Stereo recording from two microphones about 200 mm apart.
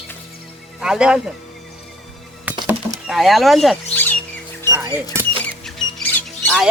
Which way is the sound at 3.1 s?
Centre (ahead or behind).